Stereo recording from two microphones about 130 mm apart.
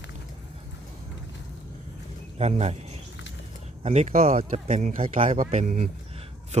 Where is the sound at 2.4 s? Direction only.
55° right (ahead or behind); by 5.9 s 70° right (ahead or behind).